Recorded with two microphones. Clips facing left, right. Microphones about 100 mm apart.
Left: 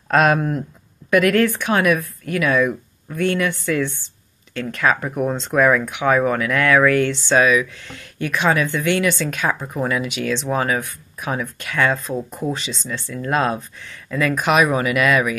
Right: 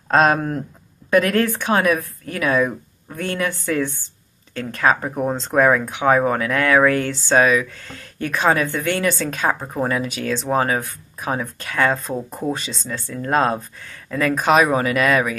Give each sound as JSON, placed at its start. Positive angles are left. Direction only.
{"t": 0.1, "sound": "speech", "side_deg": -30}